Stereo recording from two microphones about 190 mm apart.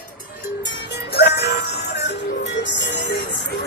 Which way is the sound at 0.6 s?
65° left (ahead or behind).